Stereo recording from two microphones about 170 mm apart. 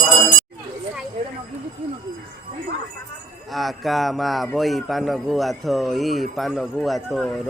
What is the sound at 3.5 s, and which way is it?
A man's voice, centre (ahead or behind).